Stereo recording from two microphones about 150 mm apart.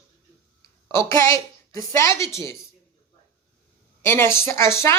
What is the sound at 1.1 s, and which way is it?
A woman's voice, 20° left (ahead or behind).